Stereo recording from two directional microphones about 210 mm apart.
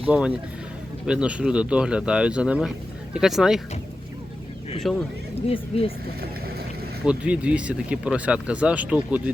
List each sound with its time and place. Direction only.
0.1 s speech: 5° right (ahead or behind)
4.9 s speech: centre (ahead or behind)
5.5 s speech: 25° left (ahead or behind)
7.0 s speech: 5° right (ahead or behind)